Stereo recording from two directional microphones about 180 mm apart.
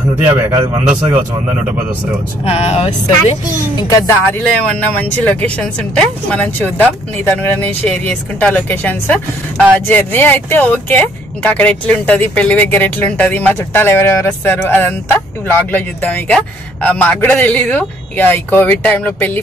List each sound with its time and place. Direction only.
0.2 s a man's voice: 10° right (ahead or behind)
2.4 s speech: 35° left (ahead or behind)
3.9 s speech: 20° left (ahead or behind)
4.6 s speech: 10° left (ahead or behind)